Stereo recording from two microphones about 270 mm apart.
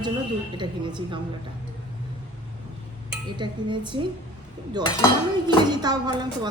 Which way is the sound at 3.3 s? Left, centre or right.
Centre.